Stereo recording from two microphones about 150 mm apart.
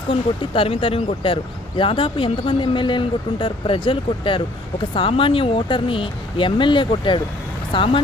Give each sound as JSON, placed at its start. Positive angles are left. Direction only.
{"t": 0.1, "sound": "speech", "side_deg": 35}